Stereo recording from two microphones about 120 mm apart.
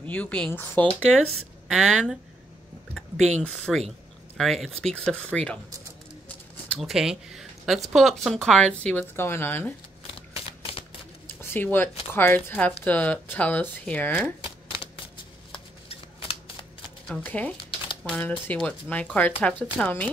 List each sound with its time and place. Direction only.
0.1 s speech: 10° left (ahead or behind)
1.7 s speech: centre (ahead or behind)
3.2 s speech: 75° right (ahead or behind)
3.4 s speech: 5° left (ahead or behind)
6.8 s speech: 5° right (ahead or behind)
9.1 s speech: 20° left (ahead or behind)
10.3 s a sound: 50° left (ahead or behind)
11.2 s a sound: 20° left (ahead or behind)
12.1 s speech: 15° left (ahead or behind)
14.4 s shuffling cards: 50° left (ahead or behind)
17.1 s speech: 10° left (ahead or behind)